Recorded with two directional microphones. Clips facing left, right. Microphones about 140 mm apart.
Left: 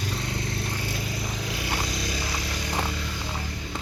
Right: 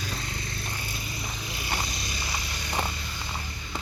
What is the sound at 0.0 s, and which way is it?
Vehicle, 75° left (ahead or behind).